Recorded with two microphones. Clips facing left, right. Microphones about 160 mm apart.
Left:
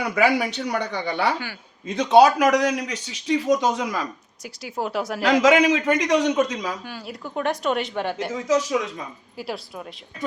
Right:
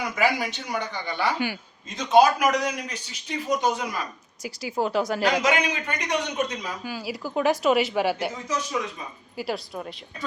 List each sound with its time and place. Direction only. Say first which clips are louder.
0.0 s a man's voice: left 4 dB; 65° left (ahead or behind); by 4.0 s 90° left
4.4 s a woman's voice: right 2 dB; centre (ahead or behind)
5.4 s a man's voice: left 7 dB; 90° left
6.8 s a woman's voice: right 3 dB; 5° right (ahead or behind)
8.4 s a man's voice: left 10 dB; 90° left
9.4 s a woman's voice: right 2 dB; centre (ahead or behind)